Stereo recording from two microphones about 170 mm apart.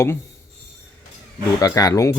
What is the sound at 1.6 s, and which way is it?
Speech, 20° left (ahead or behind).